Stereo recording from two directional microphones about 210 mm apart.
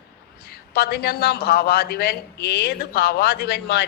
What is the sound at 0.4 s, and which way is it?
A man's voice, 45° left (ahead or behind).